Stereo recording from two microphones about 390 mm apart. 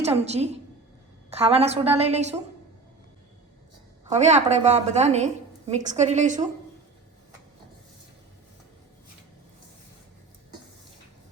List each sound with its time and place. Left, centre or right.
0.0 s a woman's voice: centre
4.0 s a woman's voice: centre